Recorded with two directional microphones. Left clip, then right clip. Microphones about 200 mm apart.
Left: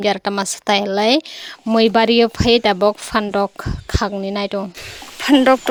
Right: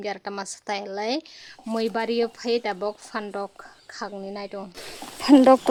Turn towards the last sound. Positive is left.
turn(degrees=0)  # may be behind; listen again after turning